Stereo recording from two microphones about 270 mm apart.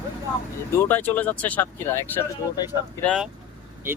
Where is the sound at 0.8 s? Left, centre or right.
Centre.